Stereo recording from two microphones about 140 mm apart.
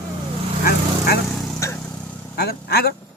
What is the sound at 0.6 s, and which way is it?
Vehicle, 90° left.